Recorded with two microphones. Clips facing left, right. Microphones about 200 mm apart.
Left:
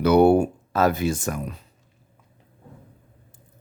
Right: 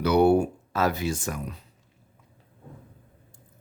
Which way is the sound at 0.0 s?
50° left (ahead or behind).